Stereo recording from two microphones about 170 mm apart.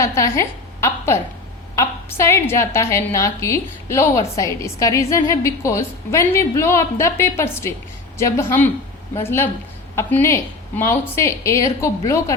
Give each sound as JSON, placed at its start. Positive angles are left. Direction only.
{"t": 0.0, "sound": "a woman's voice", "side_deg": 20}